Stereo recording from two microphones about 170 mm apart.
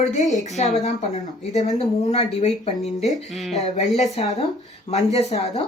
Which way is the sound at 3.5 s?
40° left (ahead or behind).